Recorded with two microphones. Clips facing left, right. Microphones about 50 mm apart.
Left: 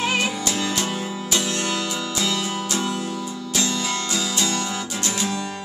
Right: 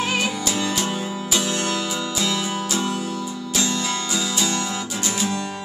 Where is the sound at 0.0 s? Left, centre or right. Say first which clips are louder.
Even; centre.